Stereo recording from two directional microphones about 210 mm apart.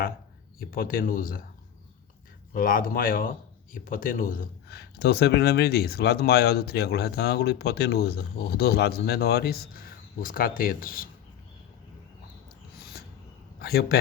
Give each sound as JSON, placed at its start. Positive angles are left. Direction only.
{"t": 0.6, "sound": "speech", "side_deg": 45}
{"t": 2.5, "sound": "speech", "side_deg": 40}
{"t": 13.6, "sound": "a man's voice", "side_deg": 50}